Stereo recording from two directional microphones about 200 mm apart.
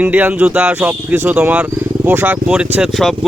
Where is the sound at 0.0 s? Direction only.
10° right (ahead or behind).